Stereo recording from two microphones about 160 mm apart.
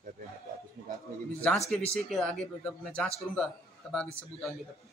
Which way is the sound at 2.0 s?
Centre (ahead or behind).